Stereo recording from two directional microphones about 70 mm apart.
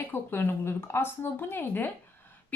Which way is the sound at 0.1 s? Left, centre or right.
Left.